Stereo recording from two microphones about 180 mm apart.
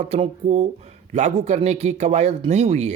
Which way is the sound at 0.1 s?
35° right (ahead or behind).